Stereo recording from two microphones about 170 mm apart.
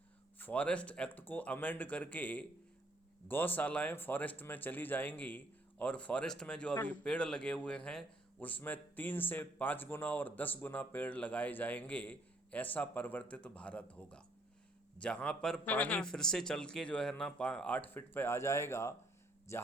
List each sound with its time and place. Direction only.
0.3 s a man's voice: 10° left (ahead or behind)